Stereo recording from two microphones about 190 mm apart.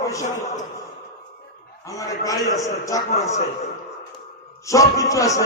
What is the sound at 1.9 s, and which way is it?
Speech, 15° left (ahead or behind).